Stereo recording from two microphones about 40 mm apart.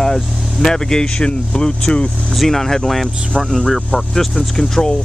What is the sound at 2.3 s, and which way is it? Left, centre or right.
Speech, centre.